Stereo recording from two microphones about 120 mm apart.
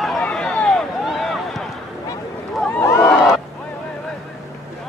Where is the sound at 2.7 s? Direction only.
20° left (ahead or behind).